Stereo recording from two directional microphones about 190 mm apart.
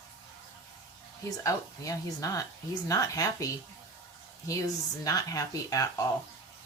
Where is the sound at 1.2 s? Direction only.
15° left (ahead or behind).